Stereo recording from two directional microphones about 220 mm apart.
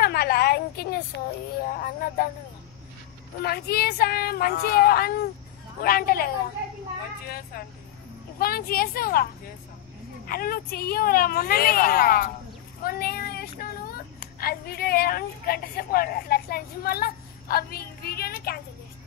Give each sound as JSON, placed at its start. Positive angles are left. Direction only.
{"t": 0.0, "sound": "a sound", "side_deg": 45}
{"t": 1.1, "sound": "speech", "side_deg": 50}
{"t": 3.4, "sound": "a woman's voice", "side_deg": 45}